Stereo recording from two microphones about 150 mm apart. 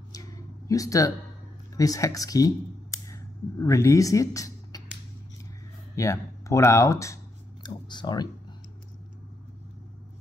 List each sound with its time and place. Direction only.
0.1 s a sound: 25° left (ahead or behind)
1.8 s speech: 20° left (ahead or behind)
5.9 s speech: 20° left (ahead or behind)